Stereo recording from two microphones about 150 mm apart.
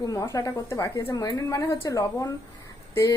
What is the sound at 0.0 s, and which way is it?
A woman's voice, 25° left (ahead or behind).